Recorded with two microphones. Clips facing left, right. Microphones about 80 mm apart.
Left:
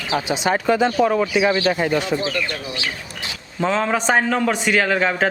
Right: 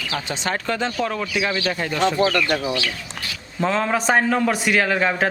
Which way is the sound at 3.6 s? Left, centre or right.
Centre.